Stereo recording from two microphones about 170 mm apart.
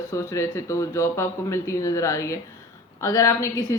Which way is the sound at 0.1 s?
15° left (ahead or behind).